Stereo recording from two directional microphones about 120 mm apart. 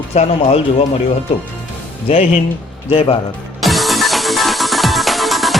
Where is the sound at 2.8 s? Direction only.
50° left (ahead or behind).